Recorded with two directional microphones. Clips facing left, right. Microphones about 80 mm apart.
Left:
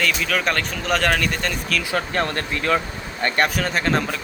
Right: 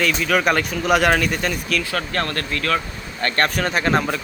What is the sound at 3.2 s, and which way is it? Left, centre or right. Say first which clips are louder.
Speech: even; centre.